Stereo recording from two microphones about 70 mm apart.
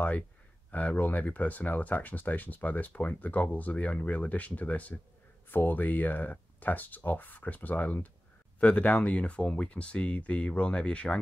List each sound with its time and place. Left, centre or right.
0.7 s speech: left